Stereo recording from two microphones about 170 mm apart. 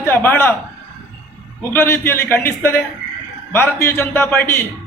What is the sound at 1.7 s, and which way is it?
A man's voice, 15° left (ahead or behind).